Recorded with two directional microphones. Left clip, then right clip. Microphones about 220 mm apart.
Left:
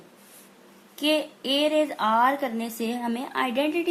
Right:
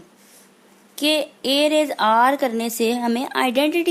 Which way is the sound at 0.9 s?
50° right (ahead or behind).